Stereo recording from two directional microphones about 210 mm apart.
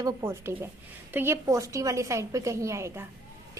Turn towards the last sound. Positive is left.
turn(degrees=-15)  # may be behind; listen again after turning